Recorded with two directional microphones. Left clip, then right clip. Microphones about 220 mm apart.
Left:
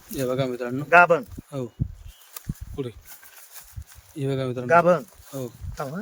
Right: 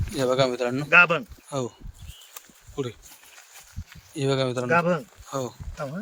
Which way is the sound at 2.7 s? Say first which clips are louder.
Right 2 dB; 10° left (ahead or behind).